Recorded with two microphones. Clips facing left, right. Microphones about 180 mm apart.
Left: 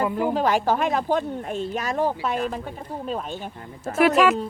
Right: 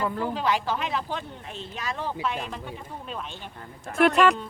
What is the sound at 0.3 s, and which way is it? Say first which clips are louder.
Speech: left 5 dB; 45° left (ahead or behind).